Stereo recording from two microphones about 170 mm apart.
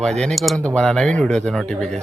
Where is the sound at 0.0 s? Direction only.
5° left (ahead or behind).